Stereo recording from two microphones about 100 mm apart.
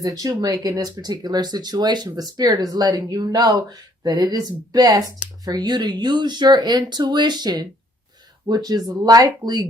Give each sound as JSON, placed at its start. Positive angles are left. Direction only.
{"t": 0.0, "sound": "speech", "side_deg": -35}